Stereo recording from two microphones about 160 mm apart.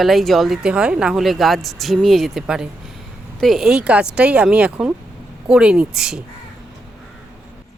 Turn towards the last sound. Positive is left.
turn(degrees=-5)  # may be behind; listen again after turning